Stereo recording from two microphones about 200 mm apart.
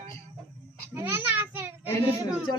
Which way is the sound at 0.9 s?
10° right (ahead or behind).